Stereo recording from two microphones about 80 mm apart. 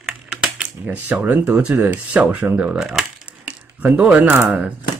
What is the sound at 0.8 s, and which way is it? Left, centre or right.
Speech, right.